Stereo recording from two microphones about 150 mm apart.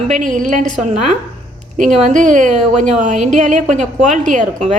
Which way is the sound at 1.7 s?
55° right (ahead or behind).